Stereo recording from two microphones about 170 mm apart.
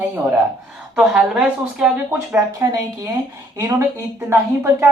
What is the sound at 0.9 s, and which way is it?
Speech, 5° right (ahead or behind).